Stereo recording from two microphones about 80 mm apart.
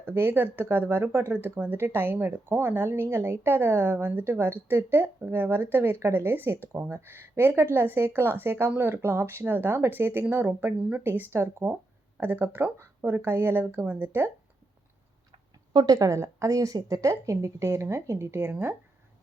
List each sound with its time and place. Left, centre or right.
0.0 s speech: right
15.7 s a woman's voice: right